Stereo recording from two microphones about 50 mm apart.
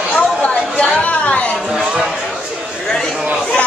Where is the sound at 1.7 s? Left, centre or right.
Centre.